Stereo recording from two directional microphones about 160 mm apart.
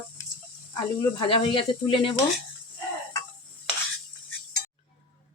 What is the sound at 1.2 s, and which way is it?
Speech, 35° left (ahead or behind).